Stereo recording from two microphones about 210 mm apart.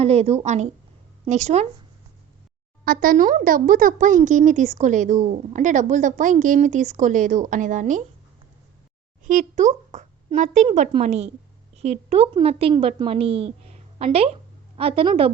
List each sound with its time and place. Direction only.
0.0 s a woman's voice: 30° right (ahead or behind)
2.8 s speech: 45° right (ahead or behind)
9.2 s a child's voice: 40° right (ahead or behind)